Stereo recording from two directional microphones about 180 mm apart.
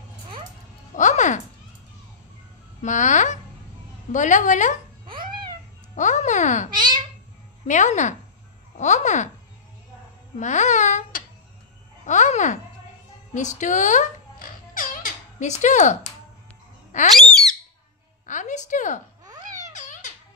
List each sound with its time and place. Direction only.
0.9 s music: 45° left (ahead or behind)
2.8 s a child's voice: 45° left (ahead or behind)
5.0 s a sound: 25° right (ahead or behind)
5.9 s a child's voice: 45° left (ahead or behind)
6.8 s a sound: 25° right (ahead or behind)
7.6 s a child's voice: 45° left (ahead or behind)
10.4 s babbling: 40° left (ahead or behind)
12.1 s a child's voice: 40° left (ahead or behind)
13.3 s music: 45° left (ahead or behind)
16.9 s a child's voice: 45° left (ahead or behind)
18.2 s a sound: 45° left (ahead or behind)
19.7 s music: 45° left (ahead or behind)